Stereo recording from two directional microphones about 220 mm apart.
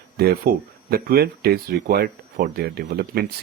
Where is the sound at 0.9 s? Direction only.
40° right (ahead or behind).